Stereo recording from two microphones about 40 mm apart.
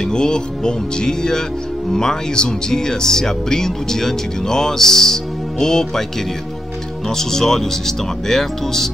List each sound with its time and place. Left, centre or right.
0.0 s music: centre
1.9 s speech: centre
7.1 s speech: centre